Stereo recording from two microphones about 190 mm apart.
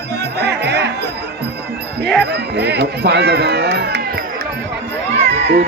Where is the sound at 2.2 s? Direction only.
60° right (ahead or behind).